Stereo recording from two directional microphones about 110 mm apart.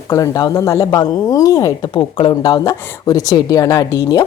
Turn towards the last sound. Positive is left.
turn(degrees=30)  # may be behind; listen again after turning